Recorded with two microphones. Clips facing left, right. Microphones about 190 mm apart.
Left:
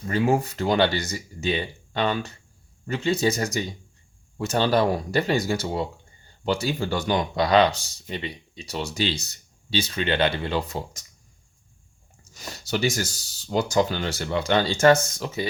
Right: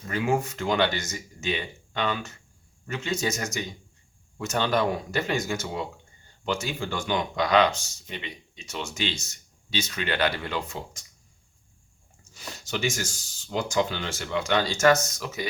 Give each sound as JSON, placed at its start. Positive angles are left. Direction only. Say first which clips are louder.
{"t": 0.1, "sound": "speech", "louder": "left 4 dB", "side_deg": 35}
{"t": 12.2, "sound": "speech", "louder": "left 2 dB", "side_deg": 40}